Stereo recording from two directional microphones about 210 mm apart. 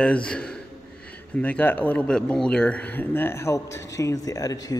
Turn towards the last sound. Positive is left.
turn(degrees=15)  # may be behind; listen again after turning